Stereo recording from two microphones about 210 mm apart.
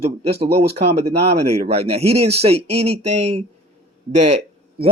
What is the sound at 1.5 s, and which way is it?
Speech, 30° right (ahead or behind).